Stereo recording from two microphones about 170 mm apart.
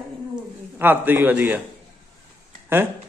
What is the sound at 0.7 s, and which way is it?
Speech, 10° right (ahead or behind).